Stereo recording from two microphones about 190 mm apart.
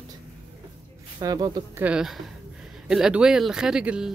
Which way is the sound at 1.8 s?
5° right (ahead or behind).